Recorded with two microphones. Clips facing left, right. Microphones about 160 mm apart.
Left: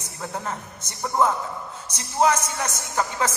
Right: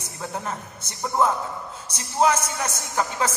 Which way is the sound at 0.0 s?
10° right (ahead or behind).